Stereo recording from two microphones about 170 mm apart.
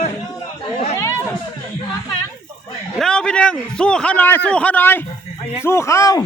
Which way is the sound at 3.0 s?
5° left (ahead or behind).